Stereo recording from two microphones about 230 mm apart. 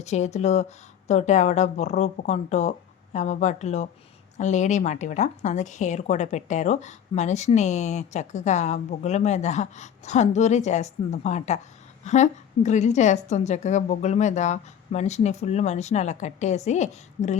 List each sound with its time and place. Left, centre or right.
0.0 s a woman's voice: left